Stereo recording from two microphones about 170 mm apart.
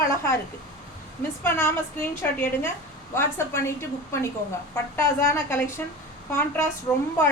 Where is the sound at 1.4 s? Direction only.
10° left (ahead or behind).